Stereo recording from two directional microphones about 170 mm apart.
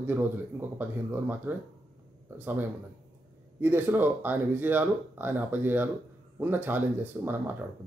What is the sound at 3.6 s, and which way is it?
Speech, 10° right (ahead or behind).